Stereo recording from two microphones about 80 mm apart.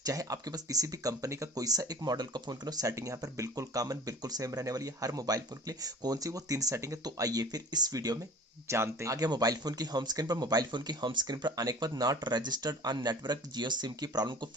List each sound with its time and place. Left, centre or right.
0.0 s speech: right
2.8 s speech: right
8.7 s speech: right
9.1 s speech: right
11.5 s speech: right